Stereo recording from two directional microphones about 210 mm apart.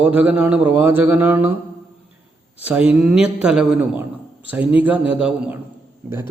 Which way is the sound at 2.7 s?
5° right (ahead or behind).